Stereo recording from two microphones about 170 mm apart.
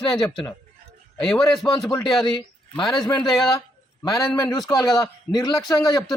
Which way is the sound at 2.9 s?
25° left (ahead or behind).